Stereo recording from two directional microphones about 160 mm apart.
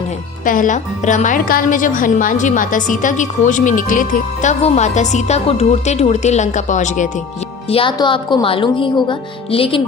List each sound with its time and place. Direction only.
0.4 s a woman's voice: 55° left (ahead or behind)
7.7 s speech: 30° left (ahead or behind)